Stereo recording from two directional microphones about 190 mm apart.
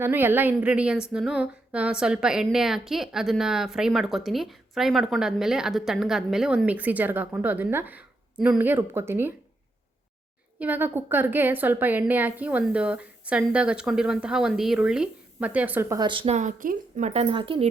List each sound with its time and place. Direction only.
0.0 s a sound: 10° right (ahead or behind)
10.6 s a woman's voice: 10° right (ahead or behind); by 17.1 s 45° right (ahead or behind)
17.1 s speech: 30° right (ahead or behind)